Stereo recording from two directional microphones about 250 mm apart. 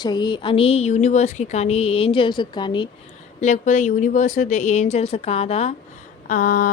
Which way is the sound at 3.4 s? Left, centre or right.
Left.